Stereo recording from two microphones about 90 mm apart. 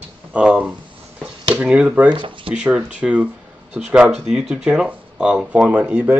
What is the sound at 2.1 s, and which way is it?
Speech, 75° right (ahead or behind).